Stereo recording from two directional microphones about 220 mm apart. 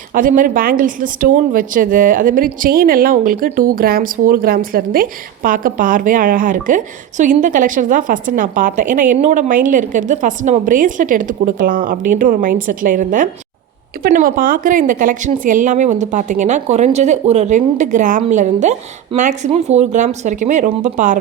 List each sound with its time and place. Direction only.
0.1 s speech: 40° right (ahead or behind)